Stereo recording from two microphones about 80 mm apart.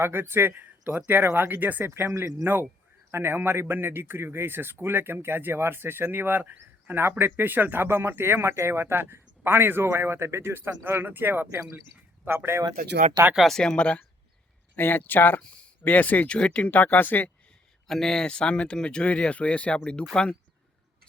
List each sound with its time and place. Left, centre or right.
0.0 s speech: right
1.9 s speech: right
13.3 s speech: centre
14.8 s speech: left
17.8 s speech: centre